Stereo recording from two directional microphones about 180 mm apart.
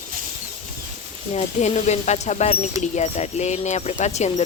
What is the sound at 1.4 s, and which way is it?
Speech, 40° left (ahead or behind).